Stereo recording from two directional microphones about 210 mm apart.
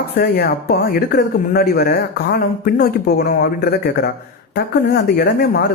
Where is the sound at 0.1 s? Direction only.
50° left (ahead or behind).